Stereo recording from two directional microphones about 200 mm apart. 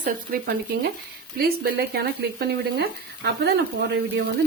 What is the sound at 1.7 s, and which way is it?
Speech, 55° right (ahead or behind).